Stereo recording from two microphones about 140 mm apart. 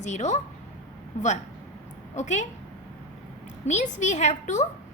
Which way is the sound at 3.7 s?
55° left (ahead or behind).